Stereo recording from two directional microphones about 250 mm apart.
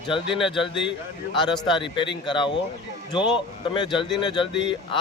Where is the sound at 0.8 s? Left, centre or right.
Centre.